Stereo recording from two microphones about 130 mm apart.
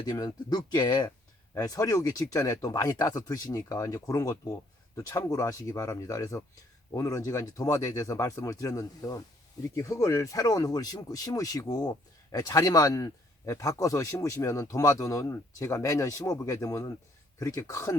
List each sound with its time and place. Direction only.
0.0 s speech: 30° left (ahead or behind)